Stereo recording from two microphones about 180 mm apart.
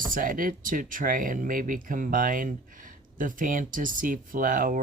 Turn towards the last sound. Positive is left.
turn(degrees=-50)  # may be behind; listen again after turning